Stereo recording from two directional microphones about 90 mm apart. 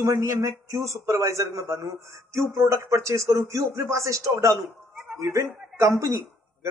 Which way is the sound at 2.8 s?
35° right (ahead or behind).